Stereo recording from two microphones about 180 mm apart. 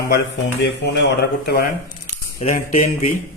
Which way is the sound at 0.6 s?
75° left (ahead or behind).